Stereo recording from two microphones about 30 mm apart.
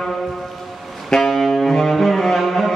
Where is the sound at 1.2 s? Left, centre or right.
Centre.